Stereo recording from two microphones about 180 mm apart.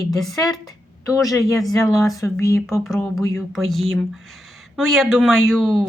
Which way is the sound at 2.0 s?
15° left (ahead or behind).